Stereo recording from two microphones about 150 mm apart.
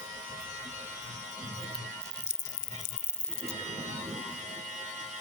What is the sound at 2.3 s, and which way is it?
Music, 15° left (ahead or behind).